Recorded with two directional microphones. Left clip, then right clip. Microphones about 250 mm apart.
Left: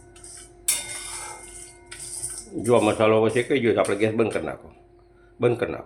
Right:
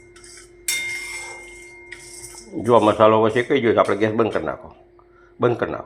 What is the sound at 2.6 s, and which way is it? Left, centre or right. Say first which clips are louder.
Speech: right 5 dB; centre.